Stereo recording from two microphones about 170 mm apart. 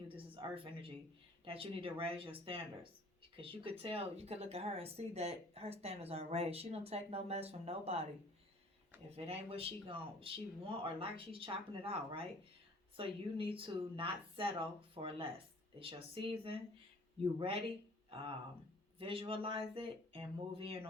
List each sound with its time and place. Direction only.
0.1 s a sound: 30° right (ahead or behind)
1.5 s speech: 30° right (ahead or behind)
9.0 s speech: 35° right (ahead or behind)
18.1 s speech: 35° right (ahead or behind)